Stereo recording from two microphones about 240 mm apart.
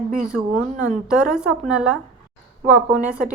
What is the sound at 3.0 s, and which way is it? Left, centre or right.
Speech, centre.